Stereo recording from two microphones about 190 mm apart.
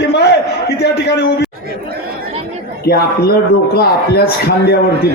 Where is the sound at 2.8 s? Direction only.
55° left (ahead or behind).